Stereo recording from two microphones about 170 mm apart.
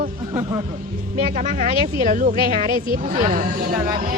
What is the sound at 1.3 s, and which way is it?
Speech, 50° right (ahead or behind).